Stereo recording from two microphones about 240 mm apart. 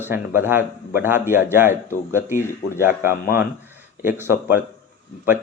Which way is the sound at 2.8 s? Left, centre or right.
Centre.